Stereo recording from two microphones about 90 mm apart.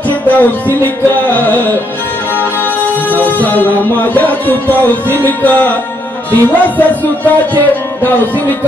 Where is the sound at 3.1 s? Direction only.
20° left (ahead or behind).